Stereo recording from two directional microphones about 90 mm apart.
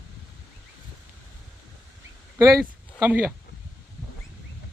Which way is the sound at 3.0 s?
20° right (ahead or behind).